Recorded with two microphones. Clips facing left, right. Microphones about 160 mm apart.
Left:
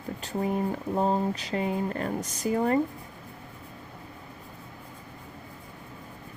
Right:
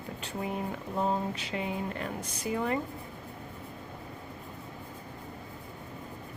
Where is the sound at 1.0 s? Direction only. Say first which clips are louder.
Left 4 dB; 35° left (ahead or behind).